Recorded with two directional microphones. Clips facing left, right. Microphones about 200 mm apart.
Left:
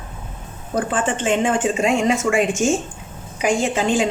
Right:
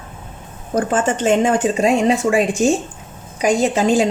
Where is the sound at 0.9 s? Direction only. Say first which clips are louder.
Right 5 dB; 40° right (ahead or behind).